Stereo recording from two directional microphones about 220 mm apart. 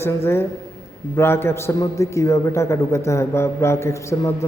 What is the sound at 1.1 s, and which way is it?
A man's voice, 10° left (ahead or behind).